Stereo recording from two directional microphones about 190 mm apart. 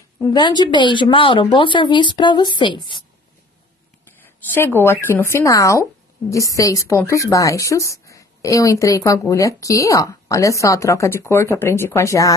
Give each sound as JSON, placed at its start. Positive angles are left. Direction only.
{"t": 0.2, "sound": "a woman's voice", "side_deg": 20}
{"t": 4.5, "sound": "a woman's voice", "side_deg": 10}